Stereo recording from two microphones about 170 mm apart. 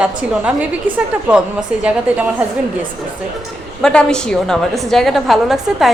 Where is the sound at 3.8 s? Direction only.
5° left (ahead or behind).